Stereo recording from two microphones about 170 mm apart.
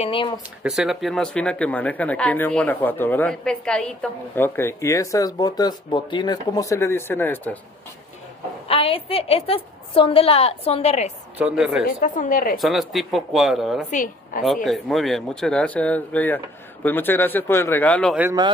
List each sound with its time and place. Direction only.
0.0 s a woman's voice: 30° left (ahead or behind)
0.7 s speech: centre (ahead or behind)
8.6 s a woman's voice: 35° left (ahead or behind)
11.3 s speech: 5° right (ahead or behind)
11.8 s a woman's voice: 55° left (ahead or behind)
12.5 s speech: centre (ahead or behind)
13.8 s a woman's voice: 50° left (ahead or behind)
14.4 s speech: centre (ahead or behind)